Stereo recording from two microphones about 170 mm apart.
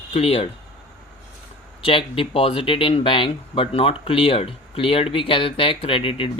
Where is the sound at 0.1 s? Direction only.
35° left (ahead or behind).